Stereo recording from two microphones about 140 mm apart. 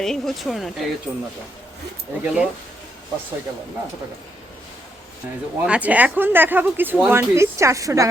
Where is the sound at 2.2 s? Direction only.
5° right (ahead or behind).